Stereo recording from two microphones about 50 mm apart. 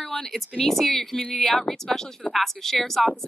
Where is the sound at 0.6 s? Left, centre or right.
Centre.